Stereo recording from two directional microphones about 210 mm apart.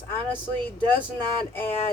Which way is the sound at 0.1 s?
10° left (ahead or behind).